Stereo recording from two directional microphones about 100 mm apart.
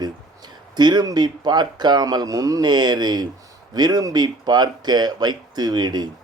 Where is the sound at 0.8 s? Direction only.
45° right (ahead or behind).